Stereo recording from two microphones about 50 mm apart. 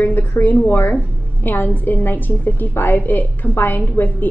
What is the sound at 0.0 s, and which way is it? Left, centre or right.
A woman's voice, left.